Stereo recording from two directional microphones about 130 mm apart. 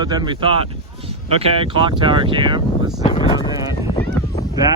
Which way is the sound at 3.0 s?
45° left (ahead or behind).